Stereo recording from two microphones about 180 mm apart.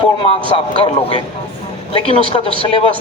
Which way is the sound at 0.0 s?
30° left (ahead or behind).